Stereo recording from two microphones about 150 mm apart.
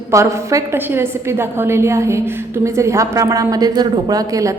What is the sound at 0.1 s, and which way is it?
A woman's voice, 20° right (ahead or behind).